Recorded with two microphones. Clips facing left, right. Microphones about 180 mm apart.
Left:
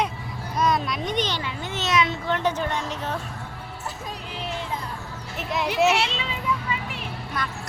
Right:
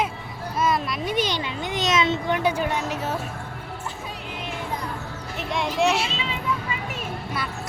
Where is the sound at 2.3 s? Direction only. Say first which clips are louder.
Right 2 dB; 10° right (ahead or behind).